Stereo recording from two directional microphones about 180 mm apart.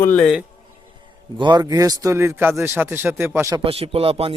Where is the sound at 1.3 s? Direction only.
25° right (ahead or behind).